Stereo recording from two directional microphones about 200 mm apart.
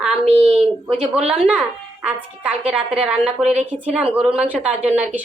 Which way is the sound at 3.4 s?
30° right (ahead or behind).